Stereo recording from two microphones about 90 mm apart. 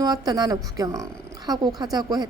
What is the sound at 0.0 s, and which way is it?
A woman's voice, 50° right (ahead or behind).